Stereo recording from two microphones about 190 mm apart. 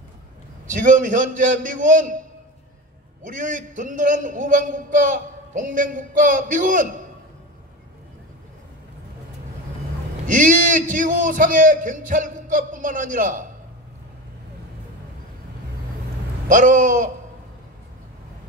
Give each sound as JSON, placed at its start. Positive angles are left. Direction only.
{"t": 0.7, "sound": "a man's voice", "side_deg": -45}
{"t": 10.2, "sound": "a man's voice", "side_deg": -45}
{"t": 16.4, "sound": "a man's voice", "side_deg": -45}